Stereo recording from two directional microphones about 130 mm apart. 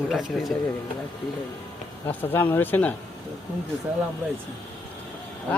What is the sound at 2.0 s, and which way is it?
Speech, 15° left (ahead or behind).